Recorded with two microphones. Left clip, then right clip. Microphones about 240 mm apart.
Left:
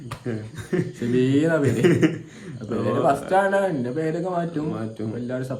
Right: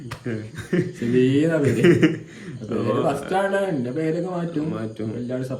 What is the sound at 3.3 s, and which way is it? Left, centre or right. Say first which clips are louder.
A man's voice: left 2 dB; centre.